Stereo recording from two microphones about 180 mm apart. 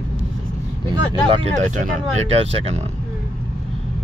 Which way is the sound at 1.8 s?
40° right (ahead or behind).